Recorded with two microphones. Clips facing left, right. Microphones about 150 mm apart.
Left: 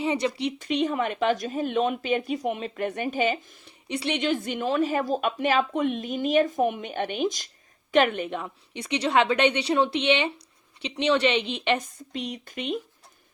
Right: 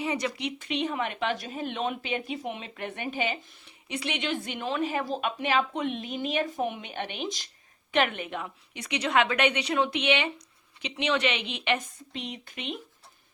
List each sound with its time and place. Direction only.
0.0 s a woman's voice: 25° left (ahead or behind)